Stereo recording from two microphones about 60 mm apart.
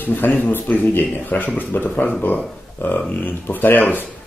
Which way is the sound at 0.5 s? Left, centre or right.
Left.